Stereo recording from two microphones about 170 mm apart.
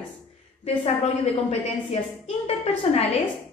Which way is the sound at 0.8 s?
40° left (ahead or behind).